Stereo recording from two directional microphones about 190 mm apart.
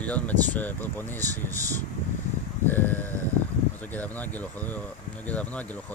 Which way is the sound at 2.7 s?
10° left (ahead or behind).